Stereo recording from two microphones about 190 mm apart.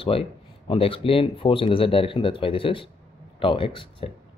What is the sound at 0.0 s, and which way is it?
Speech, 30° left (ahead or behind).